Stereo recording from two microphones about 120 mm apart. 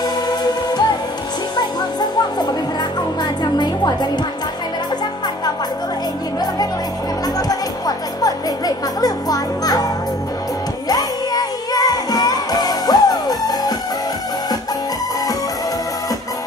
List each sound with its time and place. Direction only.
0.0 s music: 35° left (ahead or behind)
3.5 s music: 35° left (ahead or behind)
7.3 s music: 30° left (ahead or behind)
10.9 s music: 35° left (ahead or behind)